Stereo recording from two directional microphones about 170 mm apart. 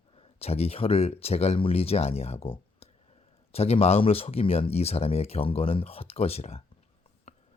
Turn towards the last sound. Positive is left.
turn(degrees=35)  # may be behind; listen again after turning